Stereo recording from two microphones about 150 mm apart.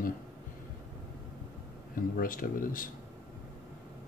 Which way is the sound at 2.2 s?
70° left (ahead or behind).